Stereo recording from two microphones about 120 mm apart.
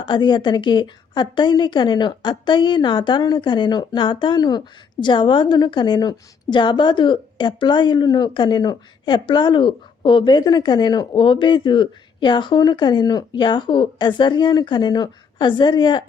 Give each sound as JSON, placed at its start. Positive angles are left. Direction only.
{"t": 0.0, "sound": "a woman's voice", "side_deg": 40}